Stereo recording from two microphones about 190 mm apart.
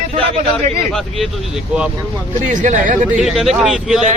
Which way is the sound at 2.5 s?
40° right (ahead or behind).